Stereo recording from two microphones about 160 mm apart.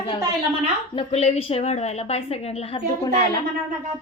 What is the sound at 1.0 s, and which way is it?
A woman's voice, 40° left (ahead or behind).